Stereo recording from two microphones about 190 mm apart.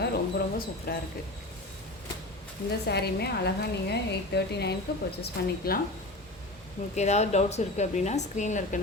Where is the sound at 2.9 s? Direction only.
60° left (ahead or behind).